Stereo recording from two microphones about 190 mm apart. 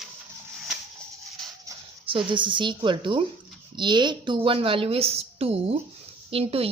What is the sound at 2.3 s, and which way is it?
A woman's voice, 25° right (ahead or behind).